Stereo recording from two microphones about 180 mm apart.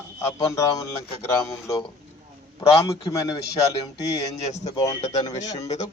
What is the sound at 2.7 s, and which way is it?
Speech, 15° left (ahead or behind).